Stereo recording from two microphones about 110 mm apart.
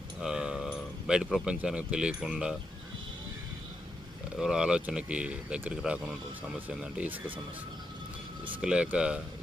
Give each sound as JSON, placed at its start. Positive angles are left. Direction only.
{"t": 0.2, "sound": "speech", "side_deg": -5}
{"t": 4.4, "sound": "speech", "side_deg": -5}
{"t": 8.6, "sound": "speech", "side_deg": -10}